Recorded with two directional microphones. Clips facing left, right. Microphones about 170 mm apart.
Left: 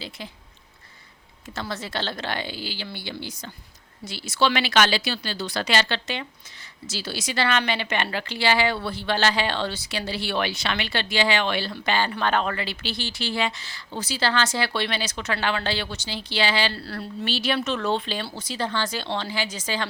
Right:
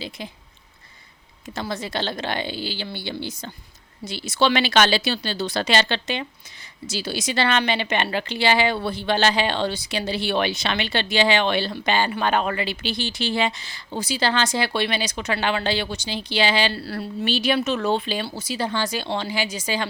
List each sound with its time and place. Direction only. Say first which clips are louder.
0.2 s speech: right 3 dB; 20° right (ahead or behind)
1.5 s speech: right 3 dB; 15° right (ahead or behind)
16.8 s speech: right 4 dB; 5° right (ahead or behind)